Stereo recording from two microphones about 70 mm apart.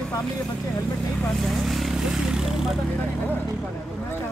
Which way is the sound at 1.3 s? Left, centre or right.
Centre.